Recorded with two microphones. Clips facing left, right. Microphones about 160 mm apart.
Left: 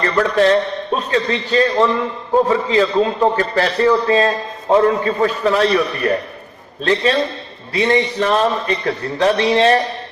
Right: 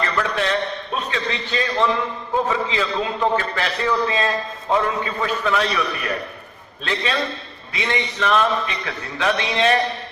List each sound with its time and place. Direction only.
0.0 s a man's voice: 40° left (ahead or behind)